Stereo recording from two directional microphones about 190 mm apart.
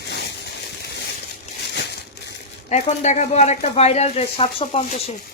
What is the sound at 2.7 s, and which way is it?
Speech, 35° left (ahead or behind).